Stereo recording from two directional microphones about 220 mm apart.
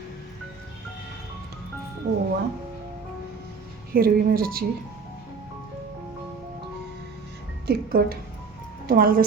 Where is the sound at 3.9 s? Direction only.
40° right (ahead or behind).